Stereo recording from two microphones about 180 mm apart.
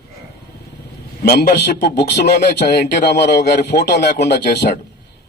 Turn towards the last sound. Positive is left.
turn(degrees=65)  # may be behind; listen again after turning